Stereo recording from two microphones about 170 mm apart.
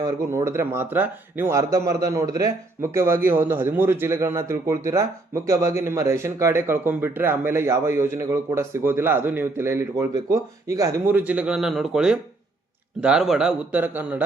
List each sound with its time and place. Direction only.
0.0 s speech: 15° right (ahead or behind)